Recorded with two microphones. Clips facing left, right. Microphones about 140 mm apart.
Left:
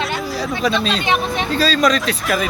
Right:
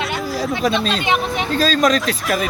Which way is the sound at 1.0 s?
15° right (ahead or behind).